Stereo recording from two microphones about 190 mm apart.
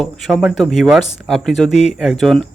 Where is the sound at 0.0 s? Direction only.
Centre (ahead or behind).